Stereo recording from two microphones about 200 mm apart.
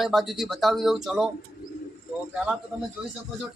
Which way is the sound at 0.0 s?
Centre (ahead or behind).